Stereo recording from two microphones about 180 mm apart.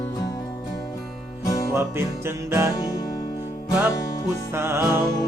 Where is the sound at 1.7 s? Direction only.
15° right (ahead or behind).